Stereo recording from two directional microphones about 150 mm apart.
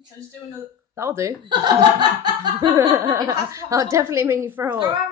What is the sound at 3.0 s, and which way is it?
A woman's voice, 20° right (ahead or behind).